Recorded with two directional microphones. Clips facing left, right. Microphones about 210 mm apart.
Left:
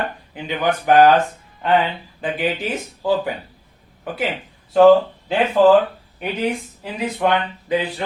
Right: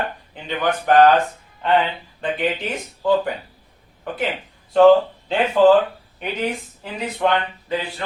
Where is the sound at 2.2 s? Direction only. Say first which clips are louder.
Left 1 dB; 5° left (ahead or behind).